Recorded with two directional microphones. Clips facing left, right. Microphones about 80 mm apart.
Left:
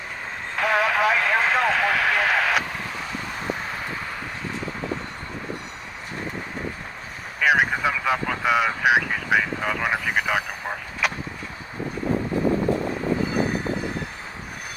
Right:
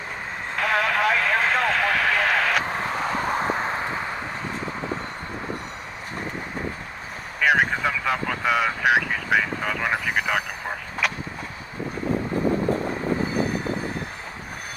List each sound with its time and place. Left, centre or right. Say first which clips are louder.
0.5 s vehicle: left 1 dB; centre
2.6 s vehicle: right 6 dB; right
7.4 s vehicle: even; centre